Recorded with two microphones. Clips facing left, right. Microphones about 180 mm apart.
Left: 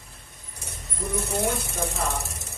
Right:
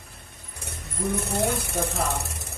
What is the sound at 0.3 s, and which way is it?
Vehicle, 65° right (ahead or behind).